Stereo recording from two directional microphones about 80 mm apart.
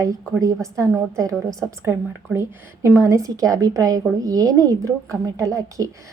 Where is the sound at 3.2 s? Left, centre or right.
Right.